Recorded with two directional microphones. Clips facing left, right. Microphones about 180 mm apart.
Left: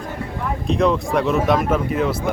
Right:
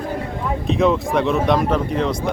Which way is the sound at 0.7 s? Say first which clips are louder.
Right 1 dB; centre (ahead or behind).